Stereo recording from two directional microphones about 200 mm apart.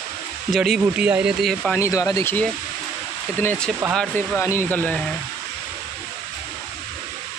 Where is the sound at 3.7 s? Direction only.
10° right (ahead or behind).